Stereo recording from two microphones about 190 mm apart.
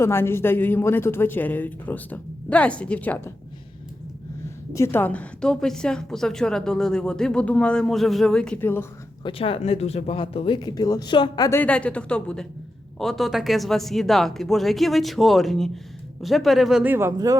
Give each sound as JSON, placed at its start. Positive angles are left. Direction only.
{"t": 0.0, "sound": "speech", "side_deg": 10}
{"t": 4.7, "sound": "a woman's voice", "side_deg": 15}
{"t": 9.2, "sound": "a woman's voice", "side_deg": 30}